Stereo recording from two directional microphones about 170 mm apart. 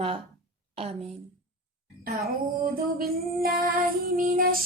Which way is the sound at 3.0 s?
60° right (ahead or behind).